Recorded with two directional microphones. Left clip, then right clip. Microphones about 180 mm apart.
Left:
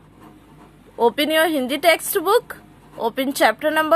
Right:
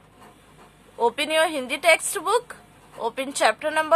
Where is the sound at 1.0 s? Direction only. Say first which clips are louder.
Left 4 dB; 20° left (ahead or behind).